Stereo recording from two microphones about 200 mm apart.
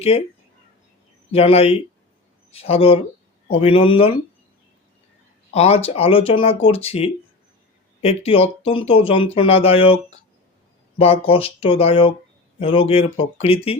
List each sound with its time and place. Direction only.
0.1 s speech: 30° left (ahead or behind)
1.3 s speech: 30° left (ahead or behind)
5.5 s speech: 30° left (ahead or behind)